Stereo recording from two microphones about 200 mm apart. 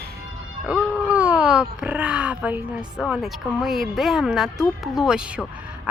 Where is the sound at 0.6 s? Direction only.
5° right (ahead or behind).